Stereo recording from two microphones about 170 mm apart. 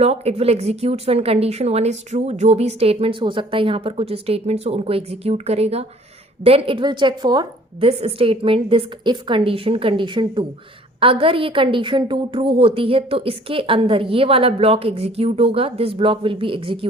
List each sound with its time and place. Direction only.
0.0 s a woman's voice: 35° right (ahead or behind)